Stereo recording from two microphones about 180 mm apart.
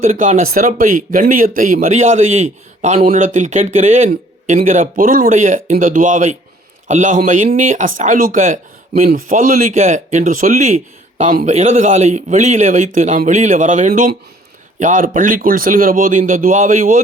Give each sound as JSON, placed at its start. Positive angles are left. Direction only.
{"t": 0.0, "sound": "a man's voice", "side_deg": -40}